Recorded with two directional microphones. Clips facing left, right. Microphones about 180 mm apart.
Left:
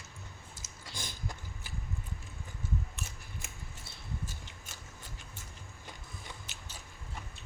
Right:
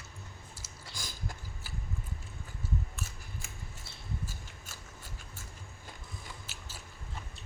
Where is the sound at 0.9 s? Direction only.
20° left (ahead or behind).